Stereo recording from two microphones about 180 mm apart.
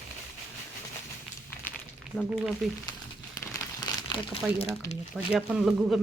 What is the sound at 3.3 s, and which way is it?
Crumpling, 20° left (ahead or behind).